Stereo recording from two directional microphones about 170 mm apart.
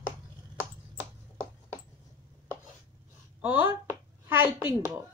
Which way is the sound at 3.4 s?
10° right (ahead or behind).